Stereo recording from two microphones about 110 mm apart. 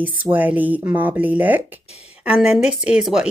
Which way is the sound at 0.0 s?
15° right (ahead or behind).